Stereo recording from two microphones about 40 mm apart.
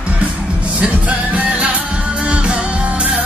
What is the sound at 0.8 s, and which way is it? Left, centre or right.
Music, right.